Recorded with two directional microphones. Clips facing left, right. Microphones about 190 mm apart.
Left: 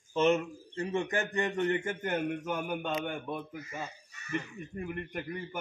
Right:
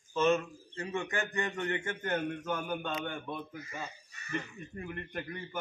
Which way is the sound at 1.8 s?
10° left (ahead or behind).